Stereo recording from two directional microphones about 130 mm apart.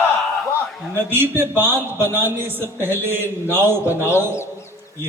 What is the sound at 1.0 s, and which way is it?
A man's voice, 15° right (ahead or behind).